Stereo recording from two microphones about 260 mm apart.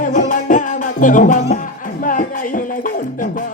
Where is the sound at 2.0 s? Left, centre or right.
Left.